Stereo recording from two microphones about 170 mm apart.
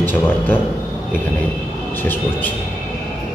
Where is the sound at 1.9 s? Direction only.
10° left (ahead or behind).